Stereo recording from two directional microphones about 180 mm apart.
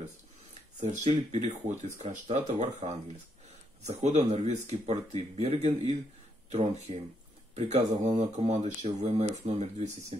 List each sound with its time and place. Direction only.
0.7 s speech: 40° right (ahead or behind)